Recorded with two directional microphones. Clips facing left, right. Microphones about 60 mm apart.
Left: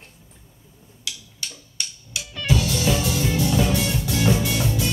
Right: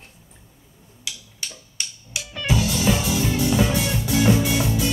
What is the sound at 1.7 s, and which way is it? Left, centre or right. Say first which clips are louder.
Music: right 1 dB; right.